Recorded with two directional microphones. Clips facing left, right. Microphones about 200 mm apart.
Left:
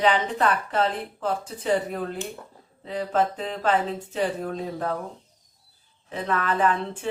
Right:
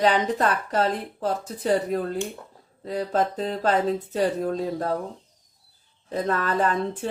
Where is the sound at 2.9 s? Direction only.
40° right (ahead or behind).